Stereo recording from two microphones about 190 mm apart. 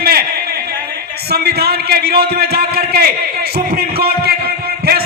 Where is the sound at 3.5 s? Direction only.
55° right (ahead or behind).